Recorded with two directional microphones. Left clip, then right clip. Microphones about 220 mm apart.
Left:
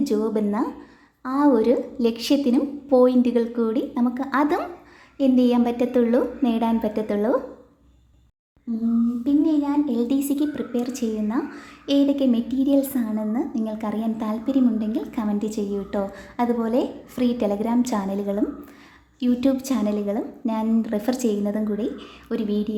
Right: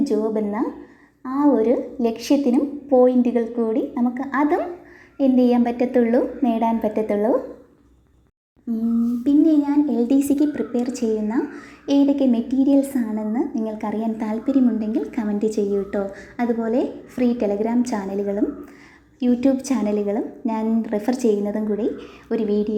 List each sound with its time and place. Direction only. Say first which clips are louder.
0.3 s a woman's voice: right 1 dB; 15° left (ahead or behind)
6.0 s a woman's voice: right 2 dB; 45° left (ahead or behind)
6.4 s a woman's voice: right 3 dB; 5° left (ahead or behind)
9.2 s a woman's voice: right 5 dB; 10° right (ahead or behind)